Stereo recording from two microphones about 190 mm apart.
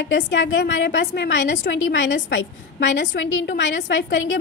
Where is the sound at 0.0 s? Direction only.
75° left (ahead or behind).